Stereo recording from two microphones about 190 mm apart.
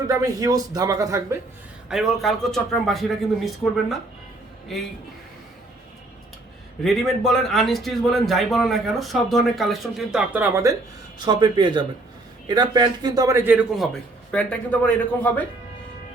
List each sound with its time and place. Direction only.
0.1 s speech: 15° right (ahead or behind)
1.9 s a man's voice: centre (ahead or behind)
6.8 s a man's voice: centre (ahead or behind)
14.3 s a man's voice: 10° left (ahead or behind)